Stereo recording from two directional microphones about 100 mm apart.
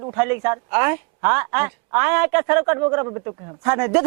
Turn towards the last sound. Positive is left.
turn(degrees=-20)  # may be behind; listen again after turning